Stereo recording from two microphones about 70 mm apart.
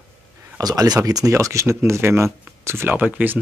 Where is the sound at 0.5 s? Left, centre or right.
Right.